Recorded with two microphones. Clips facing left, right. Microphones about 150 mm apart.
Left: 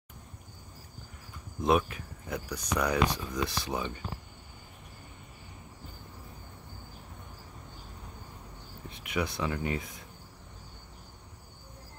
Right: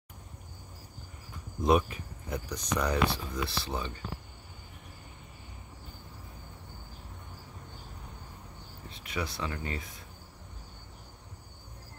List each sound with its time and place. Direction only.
1.6 s speech: centre (ahead or behind); by 3.9 s 15° left (ahead or behind)
8.8 s speech: 20° left (ahead or behind)